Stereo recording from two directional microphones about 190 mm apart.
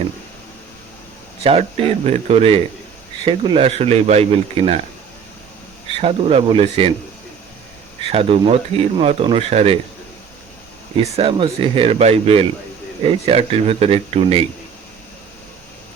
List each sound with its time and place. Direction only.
1.5 s speech: 30° right (ahead or behind)
6.0 s speech: 35° right (ahead or behind)
8.1 s speech: 30° right (ahead or behind)
10.9 s speech: 30° right (ahead or behind)